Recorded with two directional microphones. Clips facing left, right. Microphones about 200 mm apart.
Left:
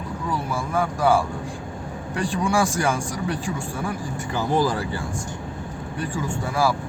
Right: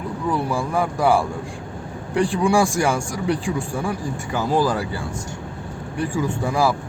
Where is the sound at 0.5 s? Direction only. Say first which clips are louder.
Right 3 dB; 15° right (ahead or behind).